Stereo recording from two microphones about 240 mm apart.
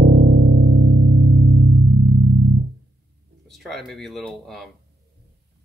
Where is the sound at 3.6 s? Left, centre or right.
Centre.